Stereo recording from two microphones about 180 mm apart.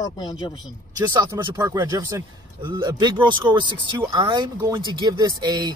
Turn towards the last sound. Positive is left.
turn(degrees=-20)  # may be behind; listen again after turning